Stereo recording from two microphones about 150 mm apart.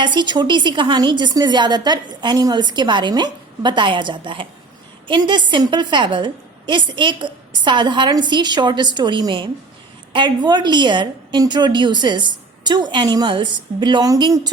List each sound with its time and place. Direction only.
0.0 s a woman's voice: 30° right (ahead or behind)